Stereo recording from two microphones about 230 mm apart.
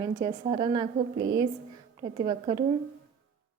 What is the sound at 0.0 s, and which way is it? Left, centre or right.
Speech, centre.